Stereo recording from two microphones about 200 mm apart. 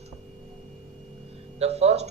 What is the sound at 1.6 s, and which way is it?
Speech, 30° right (ahead or behind).